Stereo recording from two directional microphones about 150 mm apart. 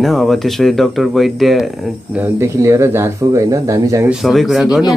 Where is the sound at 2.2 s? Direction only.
20° right (ahead or behind).